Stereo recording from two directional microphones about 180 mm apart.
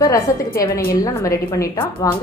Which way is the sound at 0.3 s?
15° left (ahead or behind).